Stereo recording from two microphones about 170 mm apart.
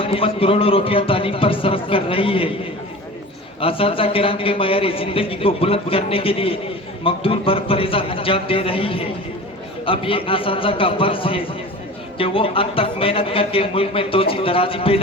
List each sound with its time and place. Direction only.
0.0 s a man's voice: 35° left (ahead or behind)
3.6 s a man's voice: 35° left (ahead or behind)